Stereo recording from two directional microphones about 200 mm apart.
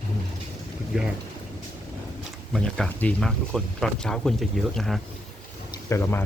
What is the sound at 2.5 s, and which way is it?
Speech, 5° left (ahead or behind).